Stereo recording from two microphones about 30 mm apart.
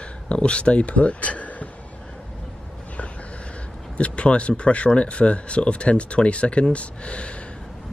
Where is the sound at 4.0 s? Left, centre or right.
Left.